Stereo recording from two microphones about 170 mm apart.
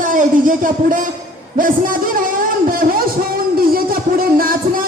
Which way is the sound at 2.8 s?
60° right (ahead or behind).